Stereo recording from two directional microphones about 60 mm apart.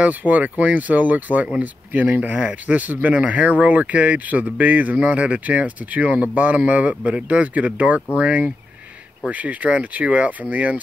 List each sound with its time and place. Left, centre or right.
0.0 s speech: right